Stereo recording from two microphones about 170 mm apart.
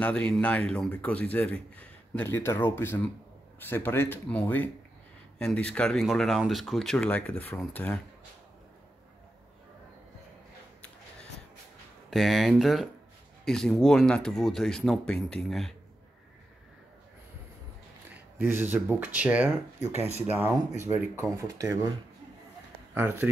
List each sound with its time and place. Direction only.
0.0 s speech: 5° left (ahead or behind)
12.1 s speech: centre (ahead or behind)
18.5 s speech: 15° right (ahead or behind)
19.9 s speech: 40° right (ahead or behind)
20.2 s speech: 10° right (ahead or behind)
22.9 s speech: 10° right (ahead or behind)